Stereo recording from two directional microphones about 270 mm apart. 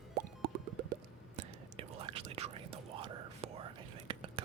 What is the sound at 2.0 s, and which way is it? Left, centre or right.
Whispering, right.